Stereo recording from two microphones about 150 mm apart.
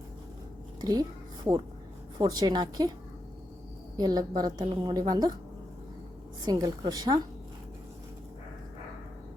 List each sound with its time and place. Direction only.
0.8 s speech: 25° right (ahead or behind)
2.1 s a woman's voice: 25° right (ahead or behind)
3.9 s a woman's voice: 25° right (ahead or behind)
6.4 s a woman's voice: 25° right (ahead or behind)